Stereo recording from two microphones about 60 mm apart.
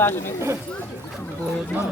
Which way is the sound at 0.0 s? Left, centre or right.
Left.